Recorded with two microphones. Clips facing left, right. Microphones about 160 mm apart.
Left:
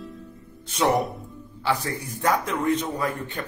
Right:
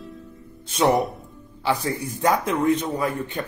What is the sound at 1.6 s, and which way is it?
Speech, 15° right (ahead or behind).